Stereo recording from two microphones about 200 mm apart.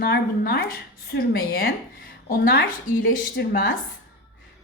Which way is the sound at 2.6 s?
60° left (ahead or behind).